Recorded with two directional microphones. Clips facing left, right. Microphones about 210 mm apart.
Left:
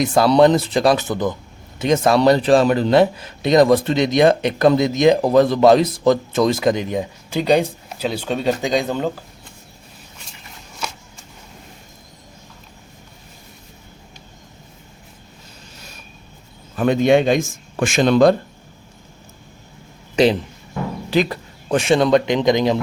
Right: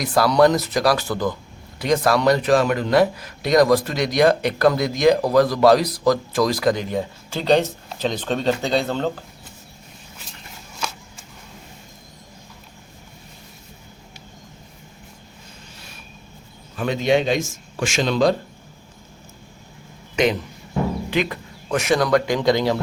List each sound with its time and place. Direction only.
0.0 s a man's voice: 25° left (ahead or behind)
16.7 s speech: 50° left (ahead or behind)
21.1 s a man's voice: 35° left (ahead or behind); by 22.8 s 20° left (ahead or behind)